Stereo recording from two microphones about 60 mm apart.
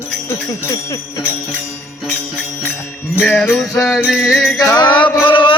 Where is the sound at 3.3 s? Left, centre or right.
Centre.